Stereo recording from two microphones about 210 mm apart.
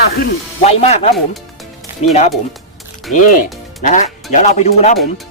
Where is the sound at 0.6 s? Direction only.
30° left (ahead or behind).